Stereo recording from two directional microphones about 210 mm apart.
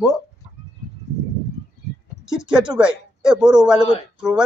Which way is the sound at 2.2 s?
5° right (ahead or behind).